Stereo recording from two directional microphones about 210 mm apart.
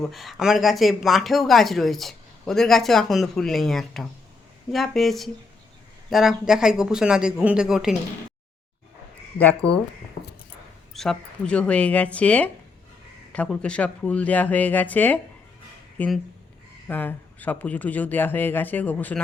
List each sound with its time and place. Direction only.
0.0 s speech: centre (ahead or behind)
9.4 s speech: 5° left (ahead or behind)
10.9 s speech: centre (ahead or behind)